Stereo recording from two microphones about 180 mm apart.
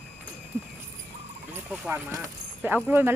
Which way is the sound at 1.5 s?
10° right (ahead or behind).